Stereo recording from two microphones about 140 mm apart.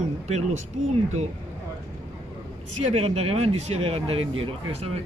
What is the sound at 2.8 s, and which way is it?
Speech, 50° right (ahead or behind).